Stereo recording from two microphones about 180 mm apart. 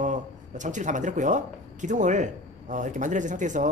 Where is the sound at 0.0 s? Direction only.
45° right (ahead or behind).